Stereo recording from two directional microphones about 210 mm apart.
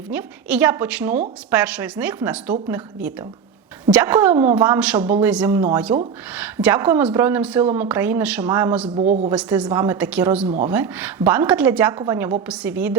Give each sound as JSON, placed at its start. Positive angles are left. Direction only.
{"t": 0.1, "sound": "a woman's voice", "side_deg": -5}
{"t": 5.9, "sound": "a woman's voice", "side_deg": -15}
{"t": 8.9, "sound": "speech", "side_deg": -30}
{"t": 9.3, "sound": "a woman's voice", "side_deg": -5}